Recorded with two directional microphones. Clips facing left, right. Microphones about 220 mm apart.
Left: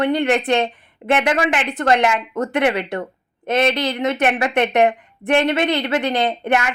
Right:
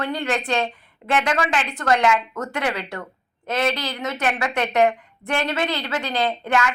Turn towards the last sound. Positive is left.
turn(degrees=20)  # may be behind; listen again after turning